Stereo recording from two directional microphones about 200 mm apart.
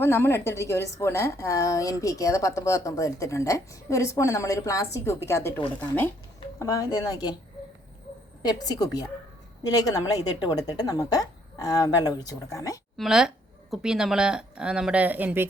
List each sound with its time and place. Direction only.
0.0 s a woman's voice: 10° left (ahead or behind)
8.4 s a woman's voice: 20° left (ahead or behind)
13.0 s speech: 5° right (ahead or behind)